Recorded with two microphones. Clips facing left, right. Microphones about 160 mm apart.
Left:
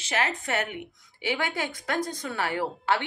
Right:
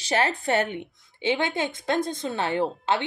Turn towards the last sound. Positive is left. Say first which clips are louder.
# right 3 dB
turn(degrees=-20)  # may be behind; listen again after turning